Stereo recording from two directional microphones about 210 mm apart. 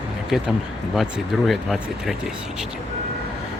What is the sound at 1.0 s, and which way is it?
Speech, centre (ahead or behind).